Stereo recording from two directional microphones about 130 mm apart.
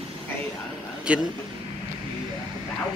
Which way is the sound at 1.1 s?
10° right (ahead or behind).